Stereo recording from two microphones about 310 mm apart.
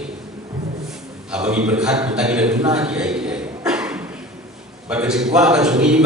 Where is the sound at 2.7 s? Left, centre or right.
Centre.